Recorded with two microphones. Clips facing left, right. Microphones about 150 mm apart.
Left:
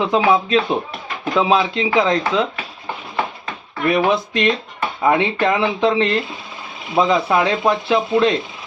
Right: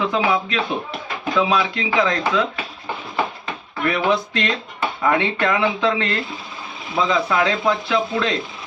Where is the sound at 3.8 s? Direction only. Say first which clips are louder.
Left 3 dB; 20° left (ahead or behind).